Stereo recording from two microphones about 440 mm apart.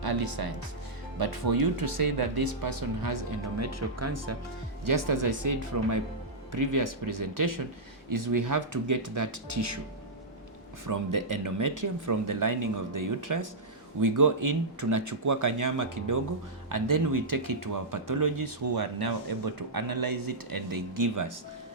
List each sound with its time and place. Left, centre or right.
0.0 s speech: right
4.9 s speech: right
10.8 s speech: right